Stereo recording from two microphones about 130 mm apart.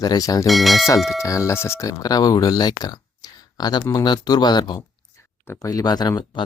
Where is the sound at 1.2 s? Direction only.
25° left (ahead or behind).